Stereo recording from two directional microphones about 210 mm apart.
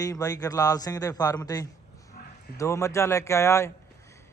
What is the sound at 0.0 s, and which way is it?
Speech, 15° left (ahead or behind).